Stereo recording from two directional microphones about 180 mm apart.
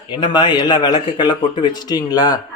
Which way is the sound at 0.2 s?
25° left (ahead or behind).